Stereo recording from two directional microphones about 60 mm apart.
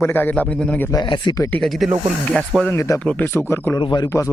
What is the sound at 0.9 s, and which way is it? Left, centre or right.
Speech, left.